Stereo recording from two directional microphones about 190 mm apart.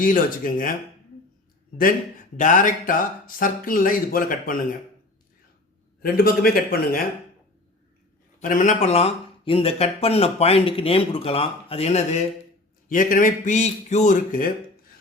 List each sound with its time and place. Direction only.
0.0 s speech: 45° left (ahead or behind)
2.3 s speech: 45° left (ahead or behind)
6.0 s speech: 50° left (ahead or behind)
8.4 s speech: 40° left (ahead or behind)